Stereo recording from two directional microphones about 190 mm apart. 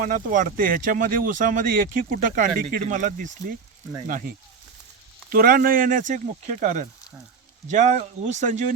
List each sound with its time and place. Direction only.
0.0 s speech: 45° right (ahead or behind)
5.3 s speech: 50° right (ahead or behind)